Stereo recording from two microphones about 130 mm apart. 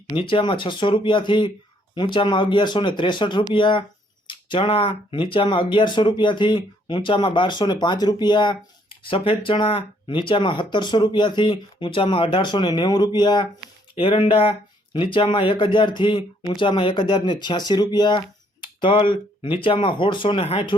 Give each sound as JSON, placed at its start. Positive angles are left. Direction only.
{"t": 0.1, "sound": "speech", "side_deg": 40}